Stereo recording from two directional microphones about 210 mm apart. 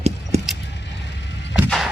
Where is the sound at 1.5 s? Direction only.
Centre (ahead or behind).